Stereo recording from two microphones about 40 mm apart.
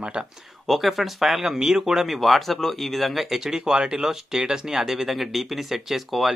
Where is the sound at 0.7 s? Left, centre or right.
Centre.